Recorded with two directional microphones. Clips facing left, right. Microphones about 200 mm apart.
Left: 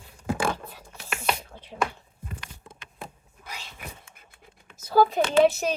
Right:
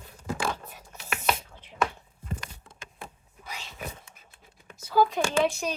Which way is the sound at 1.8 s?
Centre (ahead or behind).